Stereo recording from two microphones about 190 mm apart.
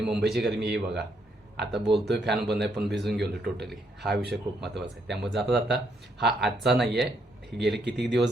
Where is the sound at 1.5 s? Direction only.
60° right (ahead or behind).